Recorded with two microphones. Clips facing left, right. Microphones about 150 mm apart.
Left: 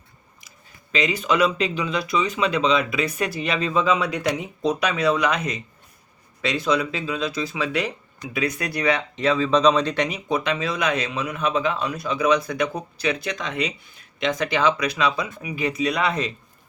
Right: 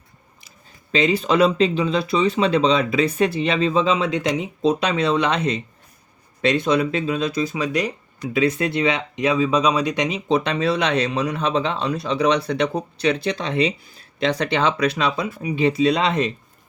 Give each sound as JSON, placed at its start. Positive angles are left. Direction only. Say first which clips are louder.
{"t": 0.9, "sound": "speech", "louder": "right 4 dB", "side_deg": -30}
{"t": 7.6, "sound": "speech", "louder": "even", "side_deg": -15}
{"t": 8.2, "sound": "speech", "louder": "right 6 dB", "side_deg": -25}